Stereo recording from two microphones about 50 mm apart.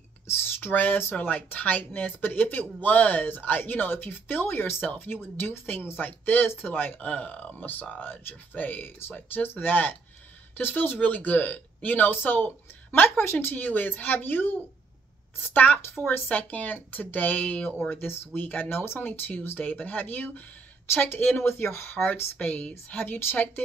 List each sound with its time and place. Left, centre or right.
0.6 s speech: left
7.1 s speech: left
8.1 s speech: left
17.8 s speech: left
20.9 s speech: left
22.9 s speech: left